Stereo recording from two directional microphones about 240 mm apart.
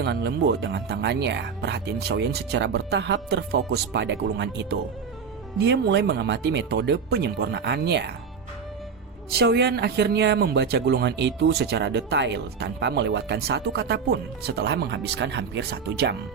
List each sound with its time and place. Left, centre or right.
0.0 s speech: right
9.3 s speech: right